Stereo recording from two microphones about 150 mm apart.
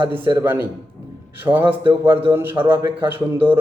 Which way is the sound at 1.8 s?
35° right (ahead or behind).